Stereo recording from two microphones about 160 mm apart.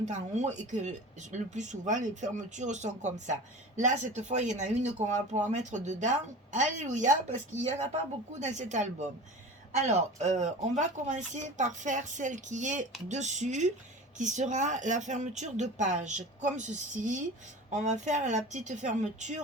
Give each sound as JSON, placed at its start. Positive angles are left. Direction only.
{"t": 0.0, "sound": "speech", "side_deg": -45}